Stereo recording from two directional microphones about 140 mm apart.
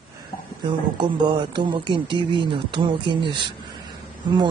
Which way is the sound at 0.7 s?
35° right (ahead or behind).